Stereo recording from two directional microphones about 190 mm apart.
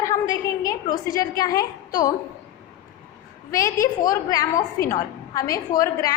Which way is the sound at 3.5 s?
15° left (ahead or behind).